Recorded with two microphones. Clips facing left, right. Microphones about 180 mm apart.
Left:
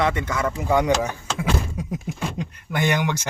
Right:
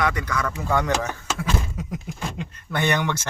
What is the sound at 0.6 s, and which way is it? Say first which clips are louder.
Speech: left 4 dB; 15° left (ahead or behind).